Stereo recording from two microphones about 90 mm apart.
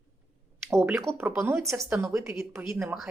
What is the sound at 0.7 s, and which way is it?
A woman's voice, 30° right (ahead or behind).